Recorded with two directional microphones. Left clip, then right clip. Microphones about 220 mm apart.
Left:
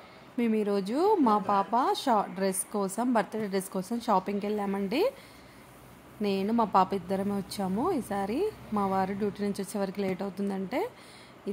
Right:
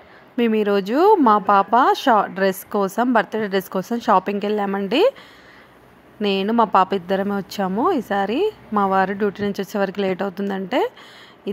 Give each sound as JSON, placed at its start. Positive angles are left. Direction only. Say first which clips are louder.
{"t": 0.4, "sound": "speech", "louder": "right 10 dB", "side_deg": -25}
{"t": 6.2, "sound": "speech", "louder": "right 10 dB", "side_deg": -25}